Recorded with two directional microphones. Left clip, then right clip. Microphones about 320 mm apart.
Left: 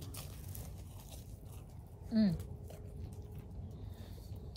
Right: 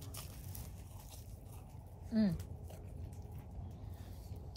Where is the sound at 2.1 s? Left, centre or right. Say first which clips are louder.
Left 2 dB; centre.